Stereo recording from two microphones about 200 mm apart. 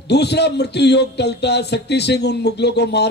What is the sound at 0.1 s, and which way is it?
A man's voice, 55° left (ahead or behind).